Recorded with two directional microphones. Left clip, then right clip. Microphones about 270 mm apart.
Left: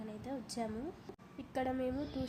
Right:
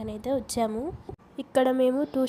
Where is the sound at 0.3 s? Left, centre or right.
Right.